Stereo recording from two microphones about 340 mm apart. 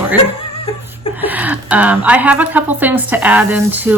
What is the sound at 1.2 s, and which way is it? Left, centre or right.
A woman's voice, centre.